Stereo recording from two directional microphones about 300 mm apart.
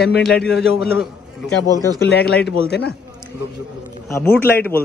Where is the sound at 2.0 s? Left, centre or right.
Left.